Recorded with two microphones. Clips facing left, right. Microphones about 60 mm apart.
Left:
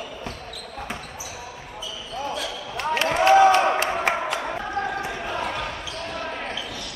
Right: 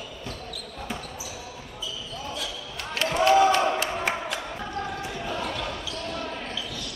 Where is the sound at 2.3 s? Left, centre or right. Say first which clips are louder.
Left 5 dB; left.